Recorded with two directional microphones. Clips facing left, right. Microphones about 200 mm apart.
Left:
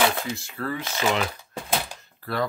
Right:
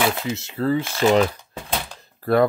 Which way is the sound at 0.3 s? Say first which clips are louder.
Right 8 dB; 25° right (ahead or behind).